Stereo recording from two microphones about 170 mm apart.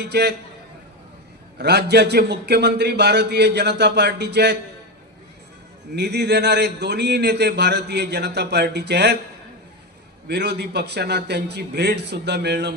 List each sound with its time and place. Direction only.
0.0 s a man's voice: 75° right (ahead or behind)
1.5 s a man's voice: 75° right (ahead or behind)
6.0 s a man's voice: 80° right
10.2 s a man's voice: 80° right